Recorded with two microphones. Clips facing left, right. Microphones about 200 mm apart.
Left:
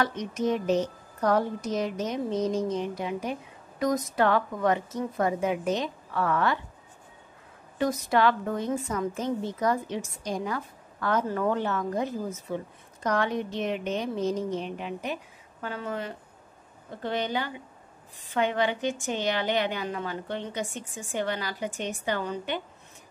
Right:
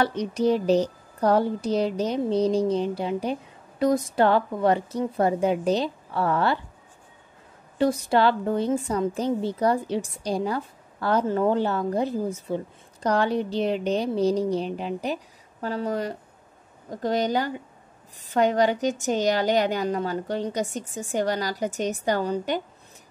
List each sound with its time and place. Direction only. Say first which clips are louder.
0.0 s a woman's voice: right 5 dB; 35° right (ahead or behind)
7.7 s a woman's voice: right 4 dB; 30° right (ahead or behind)